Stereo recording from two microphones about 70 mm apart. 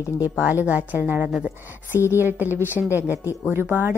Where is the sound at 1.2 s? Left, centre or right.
Centre.